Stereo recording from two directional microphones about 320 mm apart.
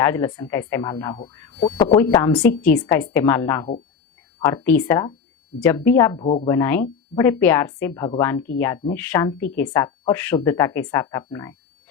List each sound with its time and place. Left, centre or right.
0.0 s a woman's voice: centre